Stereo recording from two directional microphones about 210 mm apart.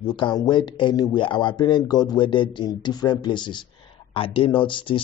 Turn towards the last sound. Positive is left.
turn(degrees=25)  # may be behind; listen again after turning